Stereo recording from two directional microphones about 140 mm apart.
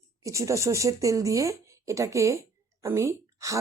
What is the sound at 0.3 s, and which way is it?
A woman's voice, 20° right (ahead or behind).